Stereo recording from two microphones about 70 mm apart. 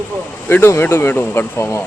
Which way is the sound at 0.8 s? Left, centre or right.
Left.